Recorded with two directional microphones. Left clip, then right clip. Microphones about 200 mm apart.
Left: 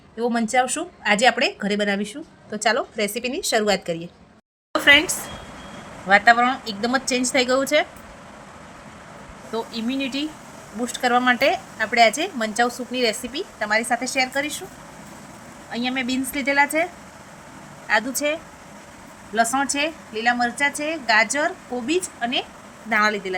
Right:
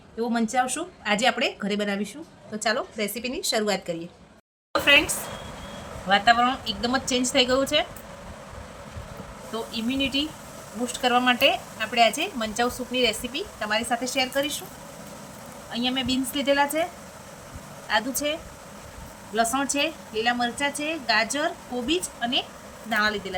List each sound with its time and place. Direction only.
0.2 s a woman's voice: 25° left (ahead or behind)
4.7 s a sound: 20° left (ahead or behind)
6.1 s a woman's voice: 20° left (ahead or behind)
9.5 s a woman's voice: 20° left (ahead or behind)
15.7 s a woman's voice: 15° left (ahead or behind)
19.3 s a woman's voice: 20° left (ahead or behind)